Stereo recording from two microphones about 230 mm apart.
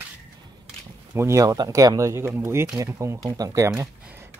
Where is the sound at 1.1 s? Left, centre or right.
Centre.